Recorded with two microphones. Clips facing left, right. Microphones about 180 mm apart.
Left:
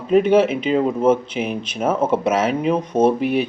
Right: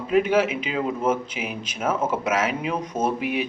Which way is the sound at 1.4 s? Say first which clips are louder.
Left 8 dB; 40° left (ahead or behind).